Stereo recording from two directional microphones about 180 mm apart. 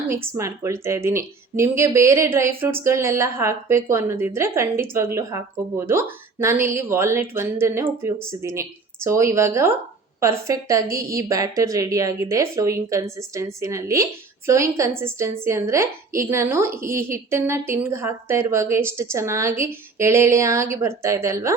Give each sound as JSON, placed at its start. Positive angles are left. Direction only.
{"t": 0.1, "sound": "speech", "side_deg": -15}